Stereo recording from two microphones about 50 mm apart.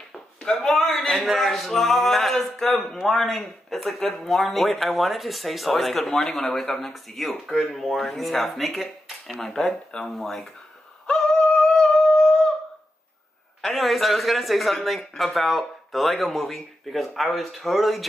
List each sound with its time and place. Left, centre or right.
0.6 s a man's voice: centre
11.1 s a sound: centre
11.5 s humming: centre
13.6 s speech: centre